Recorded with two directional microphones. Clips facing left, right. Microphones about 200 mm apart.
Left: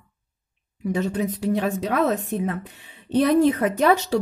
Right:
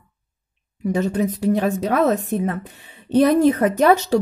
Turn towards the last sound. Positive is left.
turn(degrees=-45)  # may be behind; listen again after turning